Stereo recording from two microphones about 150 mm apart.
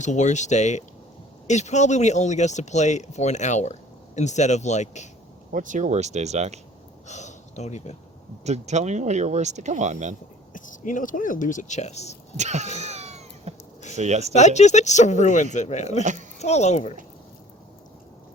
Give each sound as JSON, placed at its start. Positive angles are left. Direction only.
{"t": 0.0, "sound": "speech", "side_deg": 50}
{"t": 5.5, "sound": "speech", "side_deg": -60}
{"t": 7.1, "sound": "speech", "side_deg": 50}
{"t": 8.4, "sound": "speech", "side_deg": -50}
{"t": 10.5, "sound": "speech", "side_deg": 60}
{"t": 12.4, "sound": "speech", "side_deg": -50}
{"t": 12.6, "sound": "speech", "side_deg": 50}
{"t": 12.9, "sound": "cat", "side_deg": -45}
{"t": 13.9, "sound": "speech", "side_deg": -50}
{"t": 14.3, "sound": "speech", "side_deg": 50}